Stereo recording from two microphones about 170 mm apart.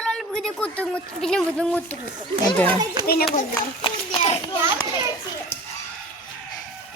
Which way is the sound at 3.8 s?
30° left (ahead or behind).